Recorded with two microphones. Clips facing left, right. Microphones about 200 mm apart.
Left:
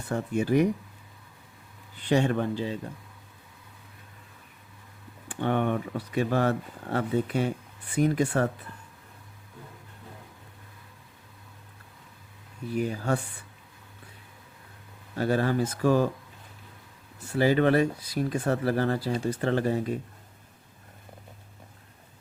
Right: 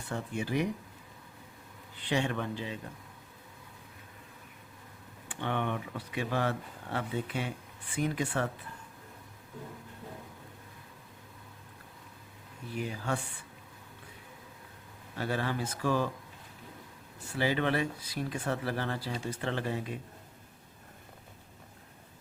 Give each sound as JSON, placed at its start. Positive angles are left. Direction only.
{"t": 0.1, "sound": "speech", "side_deg": 45}
{"t": 2.0, "sound": "speech", "side_deg": 45}
{"t": 5.3, "sound": "speech", "side_deg": 45}
{"t": 12.7, "sound": "speech", "side_deg": 45}
{"t": 15.1, "sound": "speech", "side_deg": 40}
{"t": 17.3, "sound": "speech", "side_deg": 45}